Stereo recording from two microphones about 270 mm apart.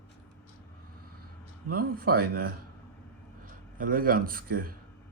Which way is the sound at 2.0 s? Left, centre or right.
Right.